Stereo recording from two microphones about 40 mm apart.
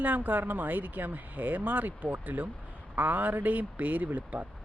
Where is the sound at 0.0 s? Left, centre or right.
Right.